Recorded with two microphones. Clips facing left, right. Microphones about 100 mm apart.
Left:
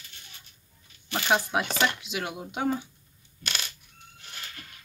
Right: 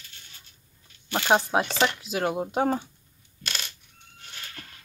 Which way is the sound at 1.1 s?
30° right (ahead or behind).